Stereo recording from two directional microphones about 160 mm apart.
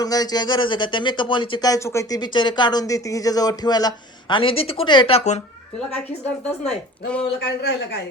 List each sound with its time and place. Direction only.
0.0 s speech: 25° left (ahead or behind); by 5.4 s 40° left (ahead or behind)
6.7 s a woman's voice: 5° left (ahead or behind)
7.3 s a man's voice: 90° left